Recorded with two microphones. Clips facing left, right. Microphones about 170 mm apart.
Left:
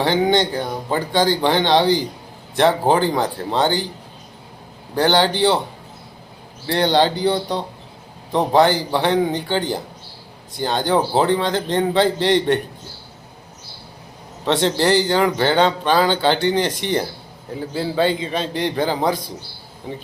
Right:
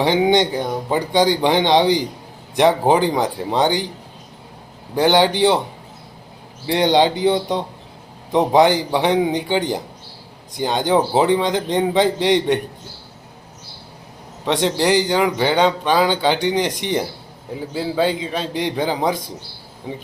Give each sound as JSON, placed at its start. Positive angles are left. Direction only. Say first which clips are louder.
{"t": 0.0, "sound": "speech", "louder": "right 2 dB", "side_deg": -15}
{"t": 4.9, "sound": "speech", "louder": "right 2 dB", "side_deg": -15}
{"t": 6.7, "sound": "speech", "louder": "right 1 dB", "side_deg": -15}
{"t": 14.4, "sound": "speech", "louder": "even", "side_deg": -10}